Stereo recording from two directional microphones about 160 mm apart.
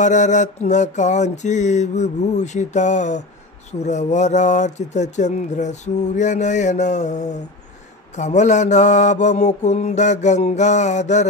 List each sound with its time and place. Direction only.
0.0 s speech: 50° left (ahead or behind)